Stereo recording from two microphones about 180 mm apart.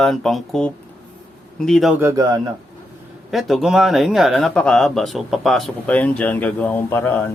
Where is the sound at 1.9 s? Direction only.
15° right (ahead or behind).